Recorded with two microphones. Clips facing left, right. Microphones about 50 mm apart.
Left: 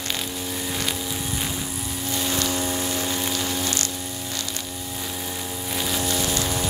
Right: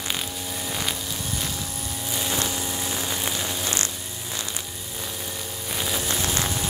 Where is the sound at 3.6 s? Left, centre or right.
Right.